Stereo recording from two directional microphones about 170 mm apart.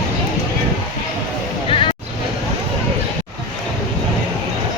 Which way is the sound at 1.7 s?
30° left (ahead or behind).